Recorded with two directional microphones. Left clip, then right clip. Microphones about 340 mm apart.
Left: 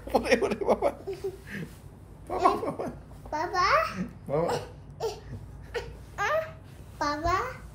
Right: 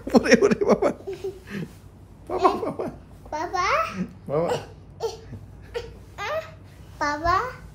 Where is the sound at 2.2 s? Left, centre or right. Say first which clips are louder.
Right 3 dB; right.